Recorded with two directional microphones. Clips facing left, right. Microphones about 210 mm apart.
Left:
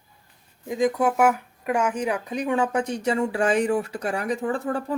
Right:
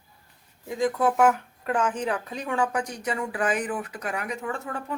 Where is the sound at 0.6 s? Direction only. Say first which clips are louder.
Left 2 dB; 15° left (ahead or behind).